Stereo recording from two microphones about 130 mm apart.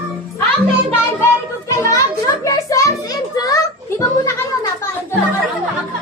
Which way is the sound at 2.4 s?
25° left (ahead or behind).